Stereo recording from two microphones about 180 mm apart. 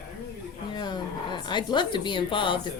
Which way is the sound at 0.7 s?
25° left (ahead or behind).